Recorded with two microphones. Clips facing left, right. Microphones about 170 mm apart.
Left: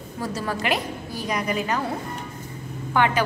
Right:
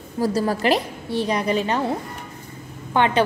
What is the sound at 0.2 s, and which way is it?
A woman's voice, 35° right (ahead or behind).